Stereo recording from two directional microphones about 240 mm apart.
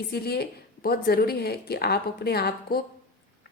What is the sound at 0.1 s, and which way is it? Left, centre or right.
Speech, left.